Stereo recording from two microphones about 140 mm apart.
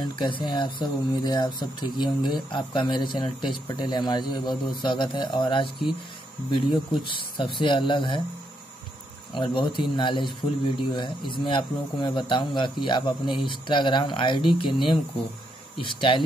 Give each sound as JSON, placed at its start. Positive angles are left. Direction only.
{"t": 0.0, "sound": "speech", "side_deg": 35}
{"t": 7.1, "sound": "speech", "side_deg": 35}
{"t": 9.3, "sound": "speech", "side_deg": 35}